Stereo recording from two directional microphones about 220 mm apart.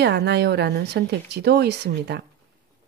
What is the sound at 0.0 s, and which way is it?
Speech, 50° right (ahead or behind).